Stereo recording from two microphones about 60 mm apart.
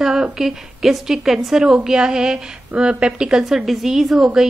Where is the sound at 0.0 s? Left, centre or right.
Centre.